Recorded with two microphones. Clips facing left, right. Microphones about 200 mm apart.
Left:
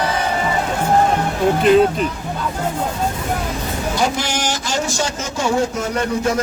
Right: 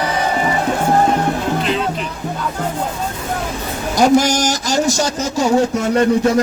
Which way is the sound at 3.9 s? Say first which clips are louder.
Right 10 dB; 40° right (ahead or behind).